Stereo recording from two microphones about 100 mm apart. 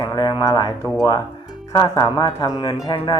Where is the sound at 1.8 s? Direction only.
45° left (ahead or behind).